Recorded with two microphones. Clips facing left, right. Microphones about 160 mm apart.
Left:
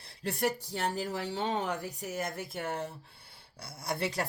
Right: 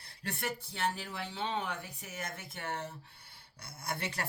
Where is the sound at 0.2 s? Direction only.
35° left (ahead or behind).